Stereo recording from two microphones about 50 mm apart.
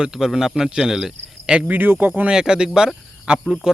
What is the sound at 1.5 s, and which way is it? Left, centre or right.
Speech, right.